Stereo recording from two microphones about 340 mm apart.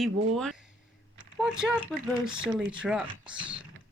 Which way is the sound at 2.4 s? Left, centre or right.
Centre.